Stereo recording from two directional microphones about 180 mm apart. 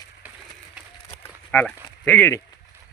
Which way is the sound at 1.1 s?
10° left (ahead or behind).